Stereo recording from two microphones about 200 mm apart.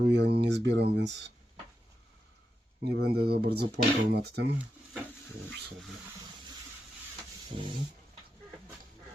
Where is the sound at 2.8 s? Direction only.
50° right (ahead or behind).